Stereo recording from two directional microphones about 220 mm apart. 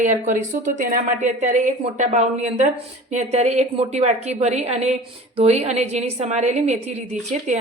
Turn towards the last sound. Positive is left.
turn(degrees=-30)  # may be behind; listen again after turning